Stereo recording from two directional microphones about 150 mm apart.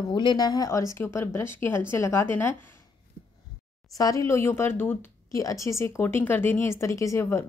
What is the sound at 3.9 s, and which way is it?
A woman's voice, 20° left (ahead or behind).